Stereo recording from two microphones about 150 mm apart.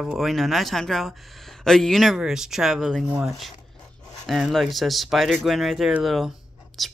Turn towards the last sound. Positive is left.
turn(degrees=0)  # may be behind; listen again after turning